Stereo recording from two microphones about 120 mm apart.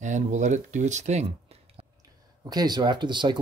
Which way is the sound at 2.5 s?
35° right (ahead or behind).